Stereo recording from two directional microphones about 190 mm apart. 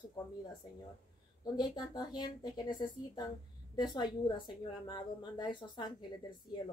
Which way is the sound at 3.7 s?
20° left (ahead or behind).